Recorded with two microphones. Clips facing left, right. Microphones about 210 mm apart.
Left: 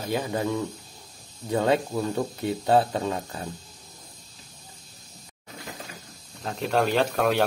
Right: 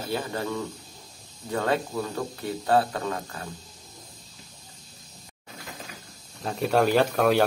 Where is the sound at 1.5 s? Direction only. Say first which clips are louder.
Left 3 dB; 20° left (ahead or behind).